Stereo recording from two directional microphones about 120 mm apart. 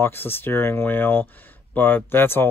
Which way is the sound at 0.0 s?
20° left (ahead or behind).